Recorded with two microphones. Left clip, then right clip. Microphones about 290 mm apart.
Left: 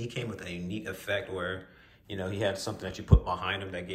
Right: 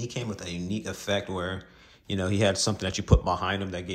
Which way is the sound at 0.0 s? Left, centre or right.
Centre.